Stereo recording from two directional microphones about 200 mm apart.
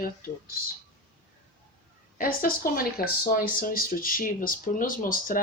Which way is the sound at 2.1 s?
45° left (ahead or behind).